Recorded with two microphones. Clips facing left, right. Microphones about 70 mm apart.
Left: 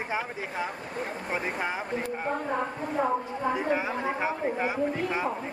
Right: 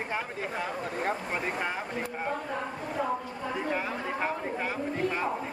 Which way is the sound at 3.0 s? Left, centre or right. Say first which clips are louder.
Left 3 dB; left.